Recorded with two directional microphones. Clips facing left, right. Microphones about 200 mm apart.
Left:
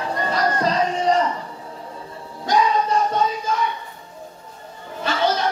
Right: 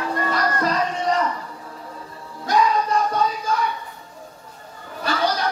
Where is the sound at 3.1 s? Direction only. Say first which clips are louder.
Left 1 dB; 25° left (ahead or behind).